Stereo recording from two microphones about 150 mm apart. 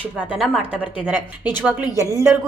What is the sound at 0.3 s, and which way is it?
Speech, centre (ahead or behind).